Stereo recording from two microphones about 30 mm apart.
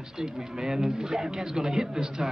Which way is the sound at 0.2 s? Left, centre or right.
Centre.